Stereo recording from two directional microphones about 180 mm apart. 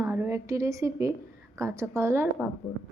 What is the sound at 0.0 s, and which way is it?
A woman's voice, 15° right (ahead or behind).